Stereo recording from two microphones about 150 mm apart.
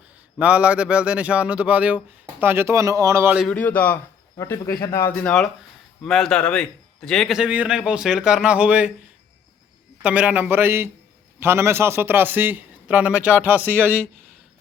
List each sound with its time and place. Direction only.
0.3 s a man's voice: 10° right (ahead or behind)
3.5 s a man's voice: 10° left (ahead or behind); by 8.9 s 10° right (ahead or behind)
10.0 s a man's voice: 10° right (ahead or behind)